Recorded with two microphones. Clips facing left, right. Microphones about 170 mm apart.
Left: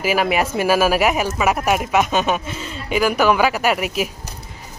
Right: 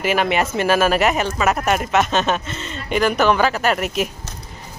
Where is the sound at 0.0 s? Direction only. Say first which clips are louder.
Even; 5° left (ahead or behind).